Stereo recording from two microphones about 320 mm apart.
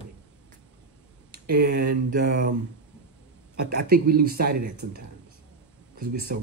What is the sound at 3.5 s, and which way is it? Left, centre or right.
Speech, right.